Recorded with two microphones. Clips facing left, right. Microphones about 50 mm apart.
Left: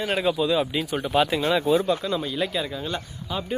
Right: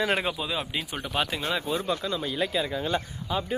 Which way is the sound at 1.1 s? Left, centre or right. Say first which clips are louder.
Left 7 dB; centre.